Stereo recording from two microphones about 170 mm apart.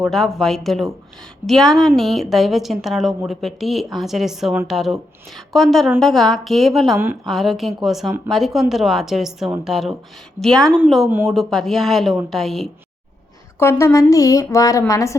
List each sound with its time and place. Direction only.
0.0 s speech: centre (ahead or behind)
13.6 s a woman's voice: 15° left (ahead or behind)